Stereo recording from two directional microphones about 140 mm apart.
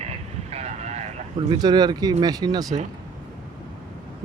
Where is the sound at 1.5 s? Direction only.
30° right (ahead or behind).